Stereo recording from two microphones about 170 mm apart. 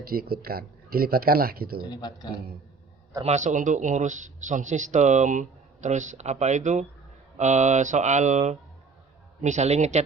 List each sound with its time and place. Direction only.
0.0 s speech: 60° right (ahead or behind)
1.8 s speech: 25° left (ahead or behind)
3.2 s speech: 45° right (ahead or behind)